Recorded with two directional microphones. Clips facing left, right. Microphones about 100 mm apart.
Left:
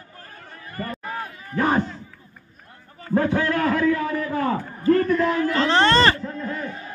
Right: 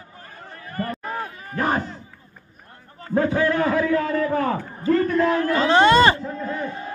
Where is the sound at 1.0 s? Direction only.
25° right (ahead or behind).